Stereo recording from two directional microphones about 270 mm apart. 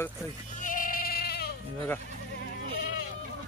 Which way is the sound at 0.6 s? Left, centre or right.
Left.